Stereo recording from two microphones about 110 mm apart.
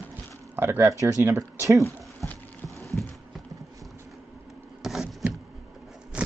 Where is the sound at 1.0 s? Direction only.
25° right (ahead or behind).